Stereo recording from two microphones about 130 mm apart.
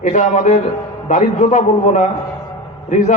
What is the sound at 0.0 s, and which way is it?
A man's voice, 70° left (ahead or behind).